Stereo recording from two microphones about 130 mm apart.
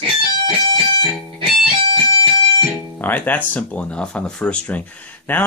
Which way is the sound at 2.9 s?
15° left (ahead or behind).